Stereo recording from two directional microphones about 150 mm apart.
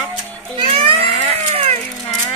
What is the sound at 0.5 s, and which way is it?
Music, 35° right (ahead or behind).